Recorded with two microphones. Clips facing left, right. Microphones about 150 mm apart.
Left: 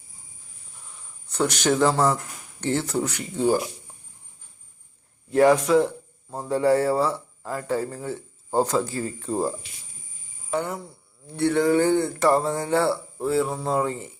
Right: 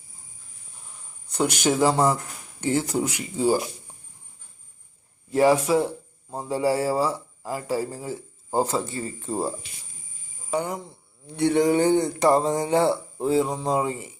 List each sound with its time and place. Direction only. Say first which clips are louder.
1.3 s a man's voice: even; 10° right (ahead or behind)
5.3 s a man's voice: left 2 dB; 5° right (ahead or behind)
10.5 s a man's voice: even; 10° right (ahead or behind)